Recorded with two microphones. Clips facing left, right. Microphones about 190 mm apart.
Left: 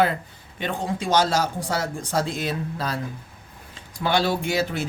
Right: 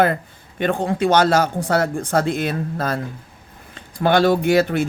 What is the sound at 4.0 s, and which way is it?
Speech, 55° right (ahead or behind).